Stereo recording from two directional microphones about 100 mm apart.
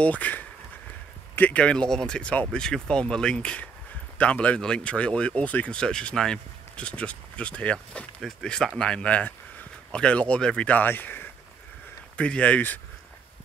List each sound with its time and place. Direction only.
0.0 s speech: 15° left (ahead or behind)